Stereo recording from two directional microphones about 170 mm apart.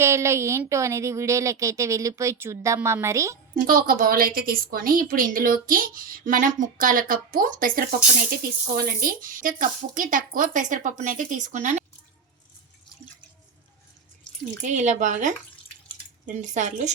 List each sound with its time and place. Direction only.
0.0 s speech: 15° right (ahead or behind)
3.5 s a woman's voice: 55° right (ahead or behind)
14.6 s speech: 45° right (ahead or behind)